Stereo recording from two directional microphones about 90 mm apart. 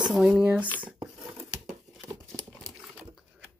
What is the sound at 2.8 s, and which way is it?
Dog, 15° right (ahead or behind).